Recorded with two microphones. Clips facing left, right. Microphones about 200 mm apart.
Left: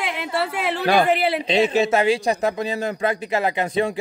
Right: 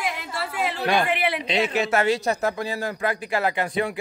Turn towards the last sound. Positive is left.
turn(degrees=20)  # may be behind; listen again after turning